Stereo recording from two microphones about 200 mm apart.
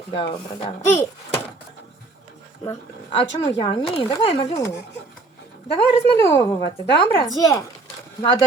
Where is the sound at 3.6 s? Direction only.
25° left (ahead or behind).